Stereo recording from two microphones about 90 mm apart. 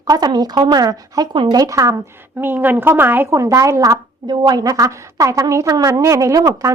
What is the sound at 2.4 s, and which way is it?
Speech, 20° right (ahead or behind).